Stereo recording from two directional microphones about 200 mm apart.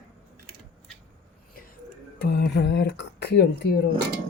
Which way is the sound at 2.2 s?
55° left (ahead or behind).